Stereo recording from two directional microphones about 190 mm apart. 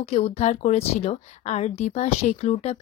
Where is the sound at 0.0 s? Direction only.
35° left (ahead or behind).